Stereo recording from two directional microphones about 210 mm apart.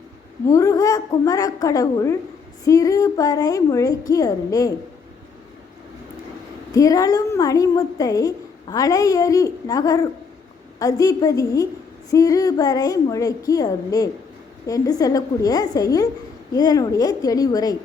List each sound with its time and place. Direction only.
0.4 s a woman's voice: 15° left (ahead or behind)
6.7 s a woman's voice: 15° left (ahead or behind)